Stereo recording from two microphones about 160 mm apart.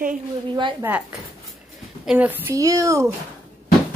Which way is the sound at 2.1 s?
10° right (ahead or behind).